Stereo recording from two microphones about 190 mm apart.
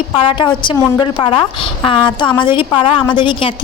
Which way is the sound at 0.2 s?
25° left (ahead or behind).